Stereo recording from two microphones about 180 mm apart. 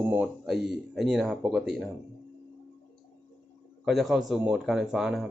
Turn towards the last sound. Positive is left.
turn(degrees=0)  # may be behind; listen again after turning